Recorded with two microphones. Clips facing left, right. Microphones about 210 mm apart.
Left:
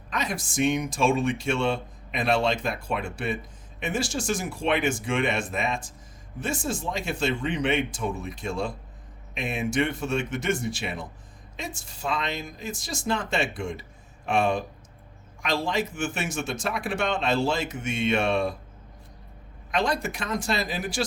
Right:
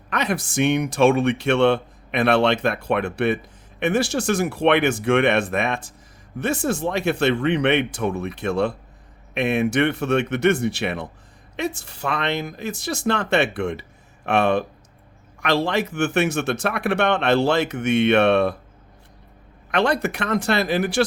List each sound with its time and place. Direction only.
0.1 s speech: 65° right (ahead or behind)
19.7 s speech: 65° right (ahead or behind)